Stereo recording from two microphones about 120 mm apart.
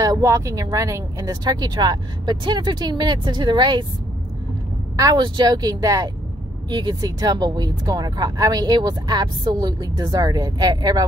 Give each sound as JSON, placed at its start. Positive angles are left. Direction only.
{"t": 0.0, "sound": "speech", "side_deg": -30}
{"t": 4.9, "sound": "speech", "side_deg": -30}